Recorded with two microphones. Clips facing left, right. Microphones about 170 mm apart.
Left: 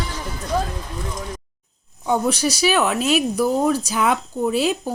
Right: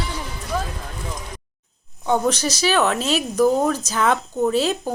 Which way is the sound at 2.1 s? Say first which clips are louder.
Even; 10° left (ahead or behind).